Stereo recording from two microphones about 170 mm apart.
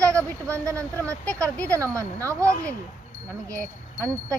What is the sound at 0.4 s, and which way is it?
Speech, 15° right (ahead or behind).